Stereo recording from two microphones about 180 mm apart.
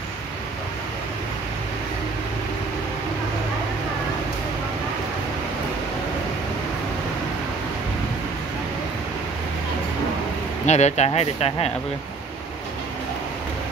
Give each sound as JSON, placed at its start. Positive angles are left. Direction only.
{"t": 10.7, "sound": "speech", "side_deg": 40}